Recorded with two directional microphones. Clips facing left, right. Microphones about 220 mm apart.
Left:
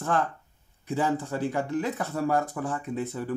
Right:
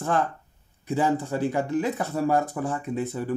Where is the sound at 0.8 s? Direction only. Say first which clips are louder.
Right 3 dB; 15° right (ahead or behind).